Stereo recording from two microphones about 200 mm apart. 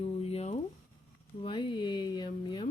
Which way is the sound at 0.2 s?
30° left (ahead or behind).